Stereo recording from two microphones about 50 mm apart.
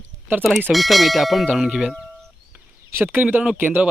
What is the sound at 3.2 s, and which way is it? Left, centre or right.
Speech, right.